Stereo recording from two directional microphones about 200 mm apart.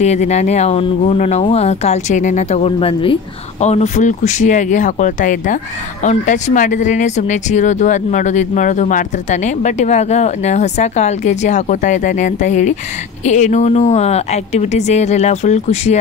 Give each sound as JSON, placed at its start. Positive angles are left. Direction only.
{"t": 0.0, "sound": "speech", "side_deg": 35}